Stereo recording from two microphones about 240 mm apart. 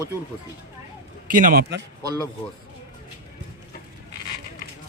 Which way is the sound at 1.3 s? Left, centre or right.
Right.